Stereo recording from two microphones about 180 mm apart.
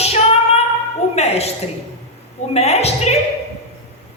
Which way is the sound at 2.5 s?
35° left (ahead or behind).